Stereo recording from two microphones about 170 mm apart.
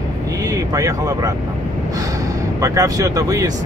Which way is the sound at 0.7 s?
20° right (ahead or behind).